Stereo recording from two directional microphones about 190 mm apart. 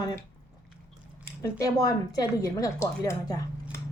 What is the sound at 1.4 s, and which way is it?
A woman's voice, 20° left (ahead or behind).